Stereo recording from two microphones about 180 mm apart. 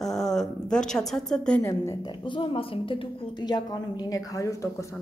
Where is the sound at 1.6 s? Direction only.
15° left (ahead or behind).